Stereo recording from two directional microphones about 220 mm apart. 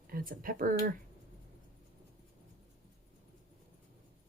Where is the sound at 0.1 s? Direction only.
40° right (ahead or behind).